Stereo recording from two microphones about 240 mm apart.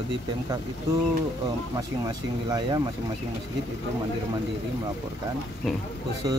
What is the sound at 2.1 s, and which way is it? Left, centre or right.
Speech, centre.